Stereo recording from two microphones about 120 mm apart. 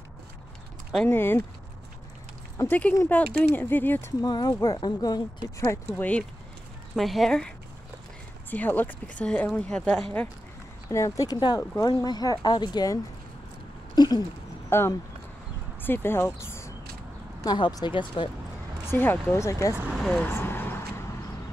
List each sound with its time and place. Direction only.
1.0 s speech: 20° left (ahead or behind)
2.5 s a sound: 25° left (ahead or behind)
3.1 s speech: 15° left (ahead or behind)
4.2 s speech: 35° left (ahead or behind)
5.9 s speech: 15° left (ahead or behind)
7.0 s speech: centre (ahead or behind)
10.9 s speech: 25° left (ahead or behind)
13.9 s a sound: 35° left (ahead or behind)
14.7 s speech: 20° left (ahead or behind)
17.4 s speech: 35° left (ahead or behind)
18.9 s speech: 20° left (ahead or behind)
19.9 s speech: centre (ahead or behind)
20.2 s a sound: 20° left (ahead or behind)